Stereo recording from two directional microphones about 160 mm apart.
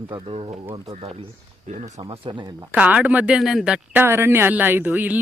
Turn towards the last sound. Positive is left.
turn(degrees=-10)  # may be behind; listen again after turning